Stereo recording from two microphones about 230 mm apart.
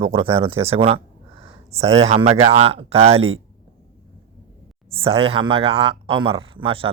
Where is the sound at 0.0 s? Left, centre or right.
Right.